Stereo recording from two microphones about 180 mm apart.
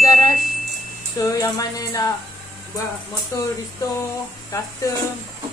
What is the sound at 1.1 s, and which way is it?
Speech, 20° left (ahead or behind).